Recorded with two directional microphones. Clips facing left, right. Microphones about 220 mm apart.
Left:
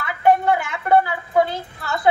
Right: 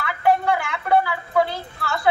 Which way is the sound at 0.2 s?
20° left (ahead or behind).